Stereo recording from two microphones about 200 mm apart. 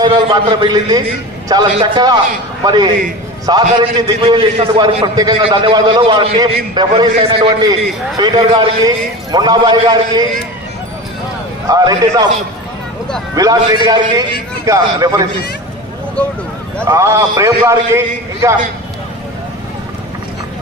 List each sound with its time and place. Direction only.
0.0 s a man's voice: 25° right (ahead or behind)
11.7 s a man's voice: 20° right (ahead or behind)
13.3 s a man's voice: 20° right (ahead or behind)
16.8 s a man's voice: 15° right (ahead or behind)